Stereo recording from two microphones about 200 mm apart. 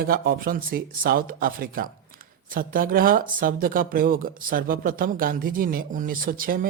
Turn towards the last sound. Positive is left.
turn(degrees=-45)  # may be behind; listen again after turning